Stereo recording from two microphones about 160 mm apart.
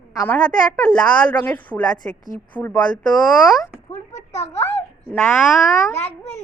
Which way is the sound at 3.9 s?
45° left (ahead or behind).